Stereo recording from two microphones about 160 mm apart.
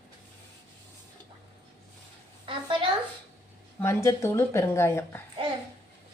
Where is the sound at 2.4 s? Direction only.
35° right (ahead or behind).